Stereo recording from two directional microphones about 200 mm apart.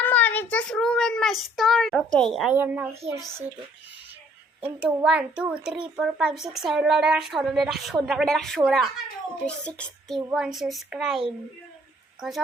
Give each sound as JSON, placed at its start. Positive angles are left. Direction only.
{"t": 0.0, "sound": "a child's voice", "side_deg": 10}
{"t": 3.0, "sound": "a child's voice", "side_deg": -30}
{"t": 4.6, "sound": "a woman's voice", "side_deg": -5}